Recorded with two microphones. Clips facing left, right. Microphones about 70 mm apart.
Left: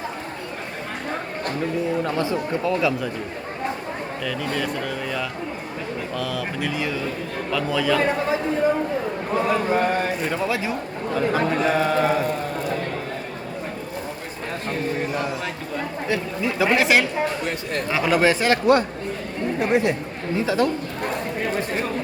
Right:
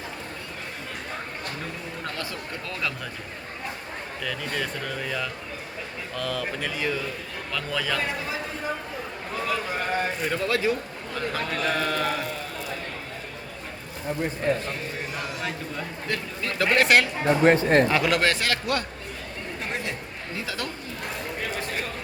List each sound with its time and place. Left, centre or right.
2.1 s a man's voice: left
2.6 s speech: centre
4.2 s speech: centre
9.3 s speech: left
9.9 s speech: centre
16.0 s speech: centre
17.2 s speech: right
17.8 s speech: centre
18.3 s a man's voice: centre